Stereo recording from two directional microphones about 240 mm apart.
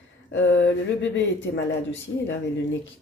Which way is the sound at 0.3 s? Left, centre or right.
Left.